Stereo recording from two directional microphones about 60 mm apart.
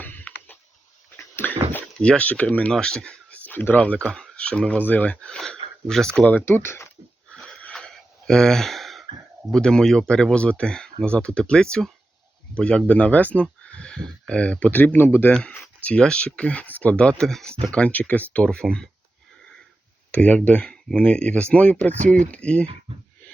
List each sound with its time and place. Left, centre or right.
0.0 s a sound: left
2.0 s speech: centre
2.7 s speech: centre
3.3 s a sound: left
3.8 s speech: left
5.4 s a sound: centre
6.4 s speech: left
8.3 s a sound: centre
9.5 s speech: centre
14.7 s speech: left
15.3 s speech: centre
17.7 s speech: left
18.4 s speech: centre
20.1 s speech: left